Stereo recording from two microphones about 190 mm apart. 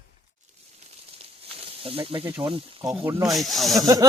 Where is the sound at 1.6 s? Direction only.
30° right (ahead or behind).